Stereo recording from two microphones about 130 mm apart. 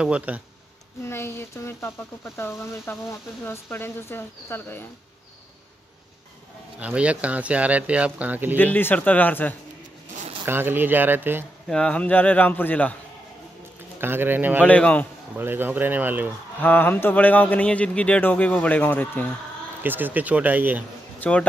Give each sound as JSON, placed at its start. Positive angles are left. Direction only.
{"t": 0.0, "sound": "speech", "side_deg": -10}
{"t": 1.0, "sound": "speech", "side_deg": 20}
{"t": 6.8, "sound": "speech", "side_deg": -10}
{"t": 8.7, "sound": "speech", "side_deg": 15}
{"t": 10.4, "sound": "speech", "side_deg": -15}
{"t": 11.7, "sound": "speech", "side_deg": 10}
{"t": 13.9, "sound": "speech", "side_deg": -15}
{"t": 14.6, "sound": "speech", "side_deg": 10}
{"t": 15.3, "sound": "speech", "side_deg": -15}
{"t": 16.6, "sound": "speech", "side_deg": 15}
{"t": 19.8, "sound": "speech", "side_deg": -15}
{"t": 21.2, "sound": "speech", "side_deg": 10}